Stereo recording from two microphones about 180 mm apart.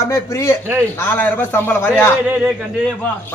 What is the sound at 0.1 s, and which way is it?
A man's voice, 15° left (ahead or behind).